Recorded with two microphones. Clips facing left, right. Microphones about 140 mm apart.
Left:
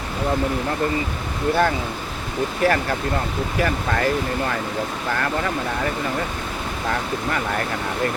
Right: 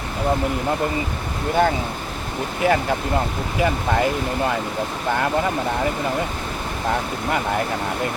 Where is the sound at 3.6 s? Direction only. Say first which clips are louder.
Right 2 dB; 20° right (ahead or behind).